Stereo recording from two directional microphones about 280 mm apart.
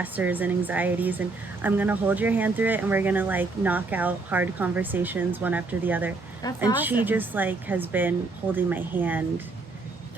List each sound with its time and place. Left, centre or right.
0.0 s speech: centre
6.4 s speech: centre
7.0 s speech: centre